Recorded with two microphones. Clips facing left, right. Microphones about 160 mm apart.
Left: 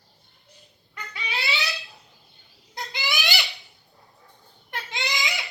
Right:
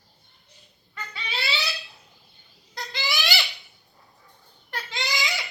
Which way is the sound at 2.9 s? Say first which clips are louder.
Right 1 dB; 20° left (ahead or behind).